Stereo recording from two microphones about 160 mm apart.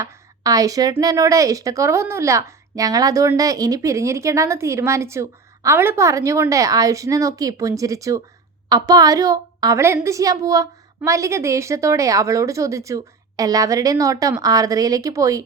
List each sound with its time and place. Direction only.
0.0 s a woman's voice: 20° right (ahead or behind)